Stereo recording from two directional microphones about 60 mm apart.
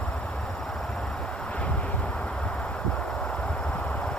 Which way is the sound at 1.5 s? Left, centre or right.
Left.